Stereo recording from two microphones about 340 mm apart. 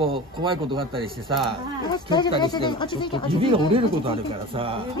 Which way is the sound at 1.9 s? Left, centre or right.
Centre.